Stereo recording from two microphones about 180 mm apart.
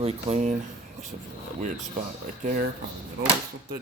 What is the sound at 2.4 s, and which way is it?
Speech, 50° right (ahead or behind).